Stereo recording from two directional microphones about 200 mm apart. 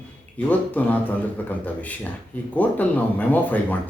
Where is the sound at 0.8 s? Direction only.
10° left (ahead or behind).